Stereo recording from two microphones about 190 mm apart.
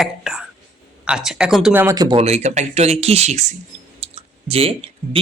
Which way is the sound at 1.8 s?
20° right (ahead or behind).